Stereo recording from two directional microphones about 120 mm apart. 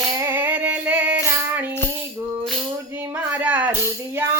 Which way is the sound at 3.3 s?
10° right (ahead or behind).